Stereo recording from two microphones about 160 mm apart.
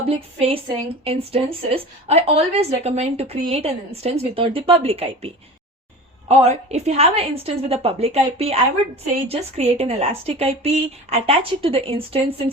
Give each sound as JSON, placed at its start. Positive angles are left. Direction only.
{"t": 0.0, "sound": "a woman's voice", "side_deg": -40}